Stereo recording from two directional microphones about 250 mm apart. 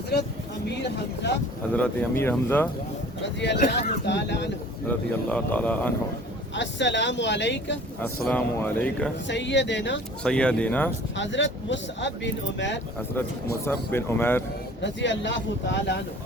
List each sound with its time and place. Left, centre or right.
0.8 s speech: left
1.7 s speech: centre
3.4 s speech: left
4.9 s speech: centre
6.5 s speech: left
8.0 s speech: centre
9.2 s speech: left
10.2 s speech: centre
11.2 s speech: left
13.7 s speech: centre
14.8 s speech: left